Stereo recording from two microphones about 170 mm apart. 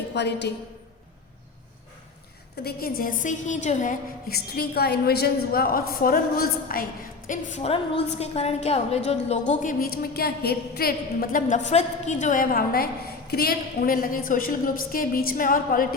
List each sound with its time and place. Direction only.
0.1 s a woman's voice: 85° left
2.6 s a woman's voice: 60° left (ahead or behind)
4.3 s a woman's voice: 65° left (ahead or behind)
7.3 s a woman's voice: 40° left (ahead or behind)
9.5 s a woman's voice: 50° left (ahead or behind)